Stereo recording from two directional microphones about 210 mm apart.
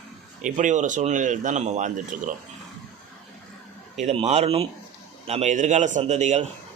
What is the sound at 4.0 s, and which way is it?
A man's voice, 30° right (ahead or behind).